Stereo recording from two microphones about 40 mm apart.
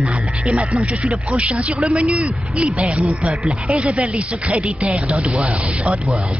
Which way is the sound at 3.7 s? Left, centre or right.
Right.